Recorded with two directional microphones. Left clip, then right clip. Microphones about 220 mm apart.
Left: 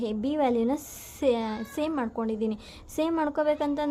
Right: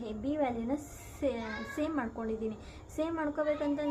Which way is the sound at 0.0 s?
50° left (ahead or behind).